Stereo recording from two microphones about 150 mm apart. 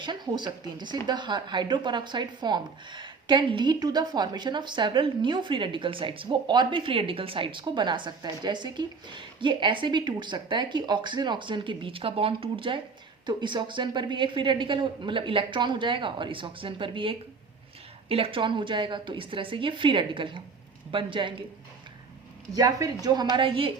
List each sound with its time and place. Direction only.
0.0 s speech: 30° right (ahead or behind)
22.5 s speech: 25° right (ahead or behind)